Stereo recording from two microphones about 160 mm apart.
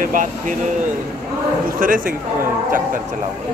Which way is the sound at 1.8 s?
60° right (ahead or behind).